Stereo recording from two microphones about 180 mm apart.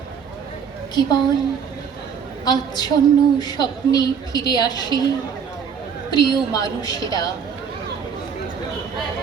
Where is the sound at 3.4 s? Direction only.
20° left (ahead or behind).